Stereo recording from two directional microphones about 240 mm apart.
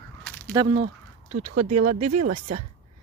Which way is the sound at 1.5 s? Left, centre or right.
Right.